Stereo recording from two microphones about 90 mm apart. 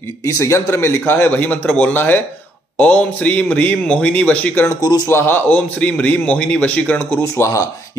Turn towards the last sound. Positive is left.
turn(degrees=35)  # may be behind; listen again after turning